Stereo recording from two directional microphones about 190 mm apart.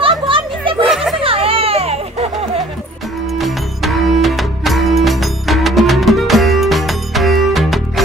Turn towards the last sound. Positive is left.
turn(degrees=0)  # may be behind; listen again after turning